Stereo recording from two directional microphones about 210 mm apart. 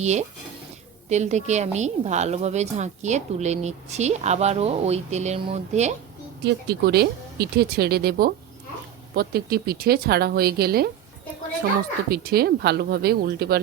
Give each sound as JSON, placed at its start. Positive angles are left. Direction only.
{"t": 0.0, "sound": "a woman's voice", "side_deg": -35}
{"t": 6.4, "sound": "speech", "side_deg": -50}
{"t": 12.1, "sound": "speech", "side_deg": -45}